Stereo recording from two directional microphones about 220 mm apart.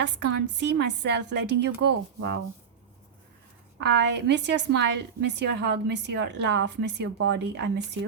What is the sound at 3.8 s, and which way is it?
A woman's voice, 50° right (ahead or behind).